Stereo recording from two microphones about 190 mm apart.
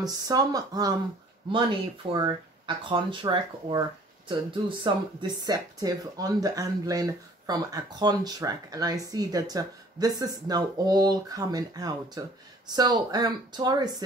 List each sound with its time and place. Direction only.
0.0 s speech: 20° right (ahead or behind)
2.1 s speech: 25° right (ahead or behind)